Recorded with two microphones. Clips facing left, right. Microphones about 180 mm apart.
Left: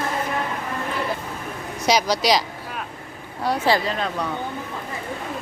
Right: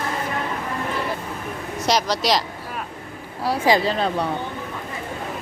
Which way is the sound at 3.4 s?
5° right (ahead or behind).